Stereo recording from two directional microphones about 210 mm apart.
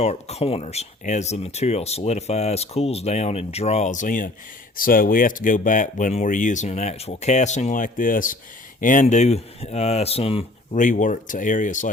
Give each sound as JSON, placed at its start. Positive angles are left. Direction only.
{"t": 0.0, "sound": "speech", "side_deg": 30}